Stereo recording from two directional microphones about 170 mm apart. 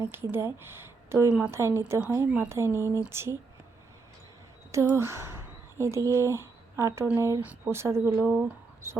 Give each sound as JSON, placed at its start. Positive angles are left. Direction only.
{"t": 0.0, "sound": "speech", "side_deg": -15}
{"t": 4.7, "sound": "speech", "side_deg": -15}